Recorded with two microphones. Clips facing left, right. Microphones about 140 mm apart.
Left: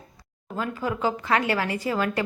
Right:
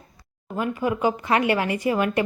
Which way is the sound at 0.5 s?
15° right (ahead or behind).